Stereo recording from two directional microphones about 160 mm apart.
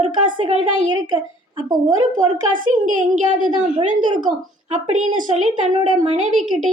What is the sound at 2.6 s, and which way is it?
A woman's voice, 55° right (ahead or behind).